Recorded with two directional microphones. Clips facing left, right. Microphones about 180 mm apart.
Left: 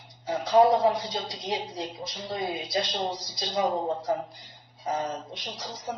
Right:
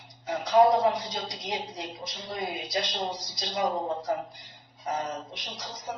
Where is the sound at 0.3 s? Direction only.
25° left (ahead or behind).